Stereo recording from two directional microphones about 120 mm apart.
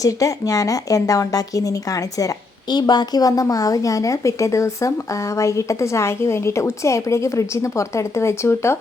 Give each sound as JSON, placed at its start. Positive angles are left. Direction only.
{"t": 0.0, "sound": "a woman's voice", "side_deg": 30}